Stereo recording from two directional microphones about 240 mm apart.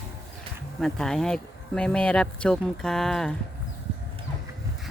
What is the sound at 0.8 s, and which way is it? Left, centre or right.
Speech, centre.